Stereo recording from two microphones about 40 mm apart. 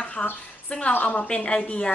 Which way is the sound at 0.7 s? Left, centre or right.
Left.